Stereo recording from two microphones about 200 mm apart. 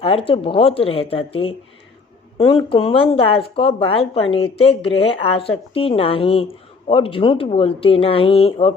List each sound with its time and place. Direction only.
0.0 s speech: 30° left (ahead or behind)